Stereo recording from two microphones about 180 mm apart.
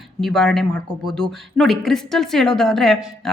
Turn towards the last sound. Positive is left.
turn(degrees=0)  # may be behind; listen again after turning